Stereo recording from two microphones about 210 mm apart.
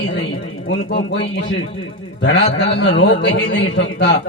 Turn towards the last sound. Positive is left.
turn(degrees=55)  # may be behind; listen again after turning